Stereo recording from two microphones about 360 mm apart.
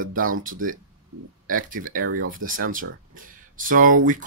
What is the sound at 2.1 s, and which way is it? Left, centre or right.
Speech, right.